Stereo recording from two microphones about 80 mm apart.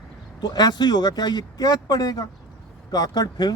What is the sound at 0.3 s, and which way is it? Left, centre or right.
Speech, left.